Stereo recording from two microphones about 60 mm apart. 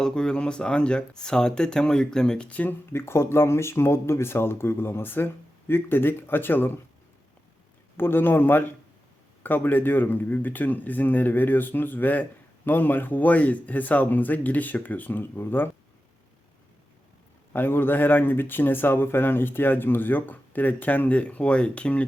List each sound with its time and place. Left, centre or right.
0.0 s speech: centre
2.5 s speech: left
2.9 s speech: left
7.9 s speech: left
17.5 s speech: left; by 22.0 s centre